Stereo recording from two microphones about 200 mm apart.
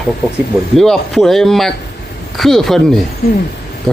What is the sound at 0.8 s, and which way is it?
Speech, centre (ahead or behind).